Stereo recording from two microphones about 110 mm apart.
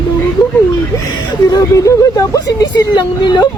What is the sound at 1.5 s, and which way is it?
Speech, 30° left (ahead or behind).